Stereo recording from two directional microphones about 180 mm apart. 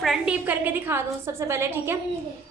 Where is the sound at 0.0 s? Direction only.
5° right (ahead or behind).